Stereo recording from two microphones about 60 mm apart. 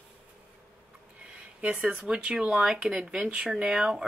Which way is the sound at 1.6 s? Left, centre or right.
Centre.